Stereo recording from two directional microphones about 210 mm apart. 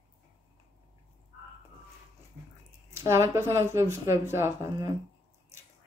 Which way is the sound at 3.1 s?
15° right (ahead or behind).